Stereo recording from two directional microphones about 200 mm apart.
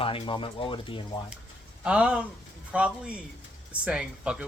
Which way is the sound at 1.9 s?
5° right (ahead or behind).